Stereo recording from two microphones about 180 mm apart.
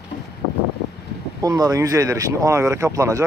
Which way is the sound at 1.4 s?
20° right (ahead or behind).